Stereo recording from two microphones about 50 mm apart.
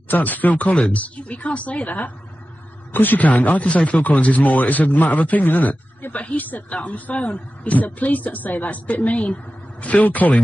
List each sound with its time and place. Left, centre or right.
0.1 s speech: left